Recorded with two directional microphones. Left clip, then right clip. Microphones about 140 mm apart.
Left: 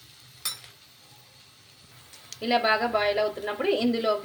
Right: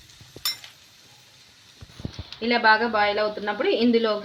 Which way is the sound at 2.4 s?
35° right (ahead or behind).